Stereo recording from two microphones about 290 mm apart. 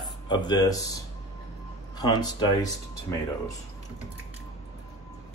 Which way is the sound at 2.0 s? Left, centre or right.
Centre.